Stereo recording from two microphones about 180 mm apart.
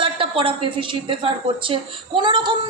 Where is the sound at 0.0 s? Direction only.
30° right (ahead or behind).